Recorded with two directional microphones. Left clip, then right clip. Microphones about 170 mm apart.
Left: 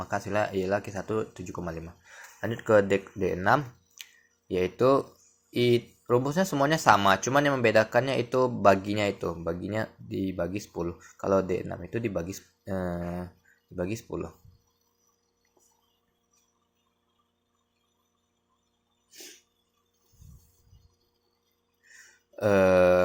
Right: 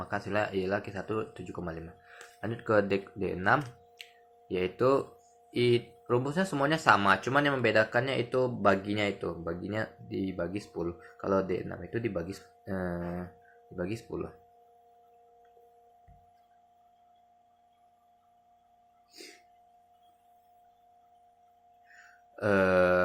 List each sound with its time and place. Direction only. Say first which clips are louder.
0.0 s speech: left 3 dB; 15° left (ahead or behind)
22.4 s speech: left 4 dB; 20° left (ahead or behind)